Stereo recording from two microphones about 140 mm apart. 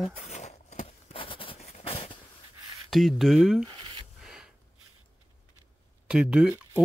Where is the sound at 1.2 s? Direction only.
40° left (ahead or behind).